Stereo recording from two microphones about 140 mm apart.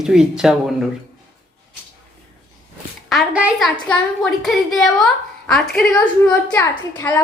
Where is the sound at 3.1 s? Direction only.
5° right (ahead or behind).